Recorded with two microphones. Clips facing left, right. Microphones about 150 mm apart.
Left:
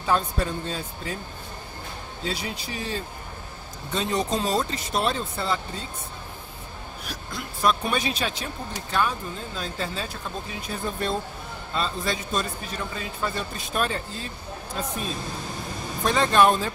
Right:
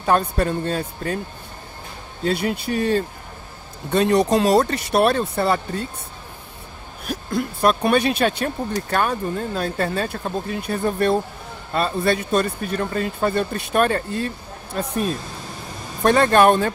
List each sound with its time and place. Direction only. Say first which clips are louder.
0.0 s speech: right 5 dB; 55° right (ahead or behind)
2.2 s speech: right 10 dB; 60° right (ahead or behind)
7.1 s speech: right 13 dB; 55° right (ahead or behind)
16.0 s speech: right 5 dB; 60° right (ahead or behind)